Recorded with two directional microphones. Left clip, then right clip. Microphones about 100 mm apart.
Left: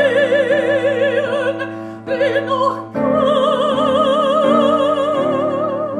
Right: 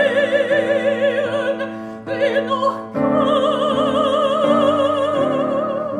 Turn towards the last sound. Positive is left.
turn(degrees=45)  # may be behind; listen again after turning